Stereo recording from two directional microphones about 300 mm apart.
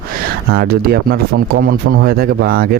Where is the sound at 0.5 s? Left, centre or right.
Right.